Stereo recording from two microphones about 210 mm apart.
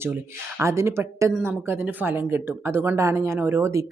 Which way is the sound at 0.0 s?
10° right (ahead or behind).